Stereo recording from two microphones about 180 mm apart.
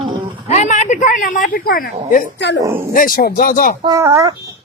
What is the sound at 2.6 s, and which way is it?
Speech, 15° right (ahead or behind).